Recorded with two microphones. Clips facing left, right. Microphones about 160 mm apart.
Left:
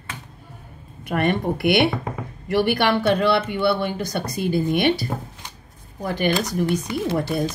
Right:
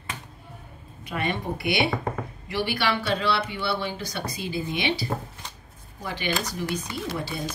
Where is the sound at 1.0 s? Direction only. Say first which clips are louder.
Left 7 dB; 60° left (ahead or behind).